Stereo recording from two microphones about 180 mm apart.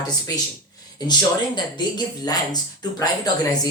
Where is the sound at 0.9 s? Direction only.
25° left (ahead or behind).